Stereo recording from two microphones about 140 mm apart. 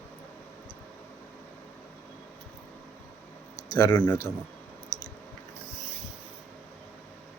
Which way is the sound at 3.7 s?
30° left (ahead or behind).